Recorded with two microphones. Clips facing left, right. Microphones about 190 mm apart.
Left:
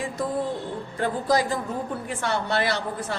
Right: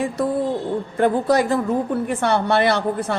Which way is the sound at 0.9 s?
60° right (ahead or behind).